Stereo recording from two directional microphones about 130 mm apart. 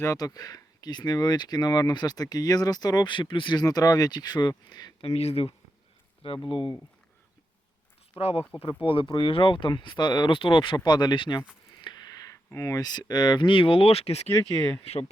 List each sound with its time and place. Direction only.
0.0 s speech: 25° left (ahead or behind)
5.0 s speech: 50° left (ahead or behind)
8.2 s speech: 50° left (ahead or behind); by 11.4 s 35° left (ahead or behind)
11.8 s a sound: 35° left (ahead or behind)
12.5 s speech: 25° left (ahead or behind); by 15.1 s 55° left (ahead or behind)